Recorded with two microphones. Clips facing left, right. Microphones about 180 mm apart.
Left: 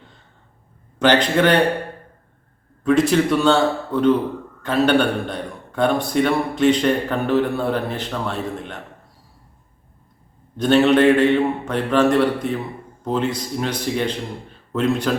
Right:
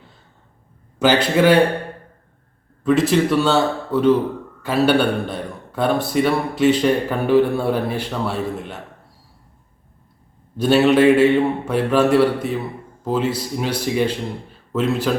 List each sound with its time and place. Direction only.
0.9 s a man's voice: 5° right (ahead or behind)
2.8 s a man's voice: centre (ahead or behind)
10.6 s a man's voice: 5° right (ahead or behind)